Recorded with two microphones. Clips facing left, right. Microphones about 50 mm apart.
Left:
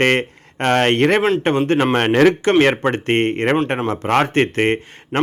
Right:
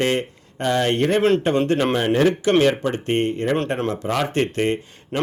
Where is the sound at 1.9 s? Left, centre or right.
Left.